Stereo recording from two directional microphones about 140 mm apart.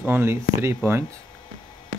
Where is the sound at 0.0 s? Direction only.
15° right (ahead or behind).